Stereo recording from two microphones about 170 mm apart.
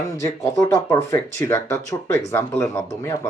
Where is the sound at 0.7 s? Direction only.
20° left (ahead or behind).